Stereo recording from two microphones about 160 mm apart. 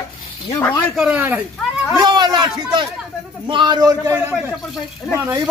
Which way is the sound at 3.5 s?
30° right (ahead or behind).